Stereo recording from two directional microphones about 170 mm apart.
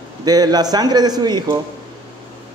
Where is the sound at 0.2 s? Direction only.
25° right (ahead or behind).